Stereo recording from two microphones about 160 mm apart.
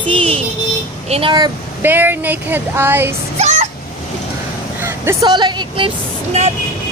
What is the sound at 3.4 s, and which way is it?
Vehicle, 40° right (ahead or behind).